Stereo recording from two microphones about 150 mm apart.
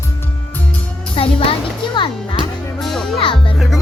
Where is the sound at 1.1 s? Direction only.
40° left (ahead or behind).